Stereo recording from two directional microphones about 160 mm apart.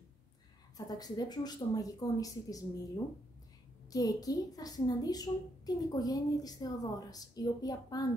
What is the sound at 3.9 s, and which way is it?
Speech, 25° left (ahead or behind).